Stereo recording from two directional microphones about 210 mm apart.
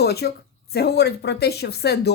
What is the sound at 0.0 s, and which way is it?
Speech, 50° left (ahead or behind).